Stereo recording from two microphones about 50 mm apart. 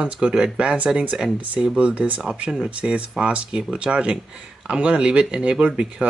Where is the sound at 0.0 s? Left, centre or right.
Centre.